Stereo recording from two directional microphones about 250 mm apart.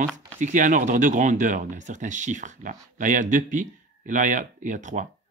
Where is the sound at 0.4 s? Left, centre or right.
Right.